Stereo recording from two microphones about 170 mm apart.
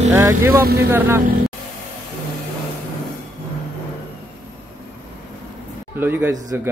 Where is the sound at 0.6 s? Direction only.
65° right (ahead or behind).